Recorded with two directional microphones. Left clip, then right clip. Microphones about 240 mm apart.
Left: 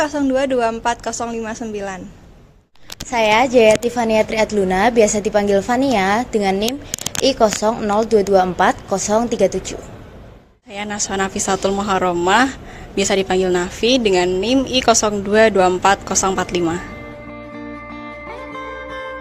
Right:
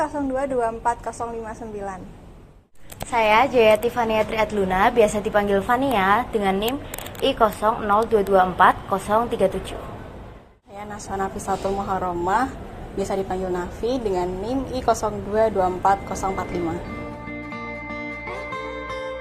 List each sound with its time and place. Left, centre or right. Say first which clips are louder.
0.0 s a woman's voice: left 6 dB; left
3.1 s a woman's voice: left 3 dB; left
10.8 s a woman's voice: left 7 dB; left